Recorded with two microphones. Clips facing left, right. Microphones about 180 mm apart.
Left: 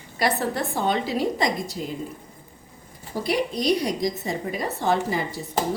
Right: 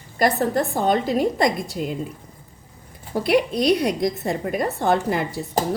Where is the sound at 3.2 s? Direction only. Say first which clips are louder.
Right 5 dB; 60° right (ahead or behind).